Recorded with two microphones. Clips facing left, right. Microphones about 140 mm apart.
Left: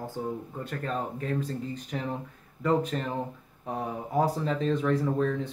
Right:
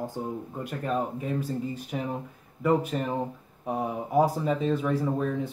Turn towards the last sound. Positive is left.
turn(degrees=-10)  # may be behind; listen again after turning